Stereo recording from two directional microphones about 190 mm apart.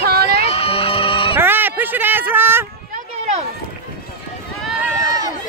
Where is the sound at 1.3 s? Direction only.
10° right (ahead or behind).